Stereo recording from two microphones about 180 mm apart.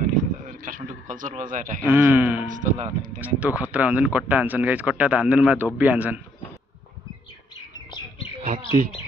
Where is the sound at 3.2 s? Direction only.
10° right (ahead or behind).